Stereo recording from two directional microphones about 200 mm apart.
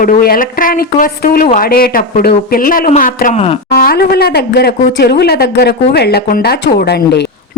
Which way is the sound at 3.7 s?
50° left (ahead or behind).